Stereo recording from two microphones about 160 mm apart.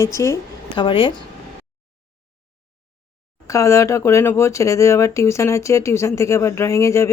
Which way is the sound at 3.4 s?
20° left (ahead or behind).